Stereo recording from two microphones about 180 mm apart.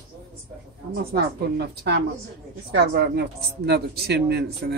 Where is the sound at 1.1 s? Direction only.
60° right (ahead or behind).